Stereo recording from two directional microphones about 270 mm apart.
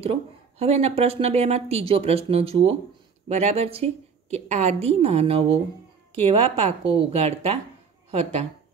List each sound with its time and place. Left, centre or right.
0.0 s a woman's voice: right